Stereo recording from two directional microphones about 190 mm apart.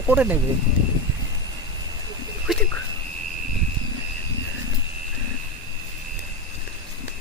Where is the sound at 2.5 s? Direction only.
Centre (ahead or behind).